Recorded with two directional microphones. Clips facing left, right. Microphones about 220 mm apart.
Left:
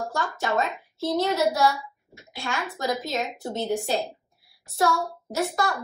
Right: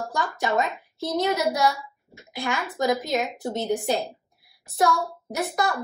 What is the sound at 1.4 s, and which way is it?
Speech, 15° right (ahead or behind).